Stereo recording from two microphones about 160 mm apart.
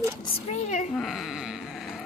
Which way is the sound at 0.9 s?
Centre (ahead or behind).